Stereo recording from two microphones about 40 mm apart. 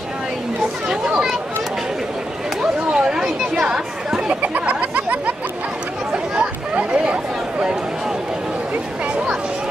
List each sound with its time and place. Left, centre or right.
0.8 s chatter: centre
2.9 s chatter: right
3.2 s chatter: centre
4.4 s chatter: right
6.7 s chatter: right